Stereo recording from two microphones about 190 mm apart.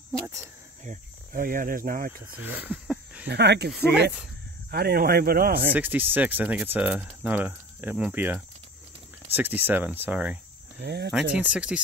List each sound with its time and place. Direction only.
0.8 s speech: 45° right (ahead or behind)
2.4 s a sound: 10° right (ahead or behind)
3.3 s speech: 60° right (ahead or behind)
5.7 s speech: 10° right (ahead or behind)
10.8 s speech: 60° right (ahead or behind)
11.3 s speech: 5° right (ahead or behind)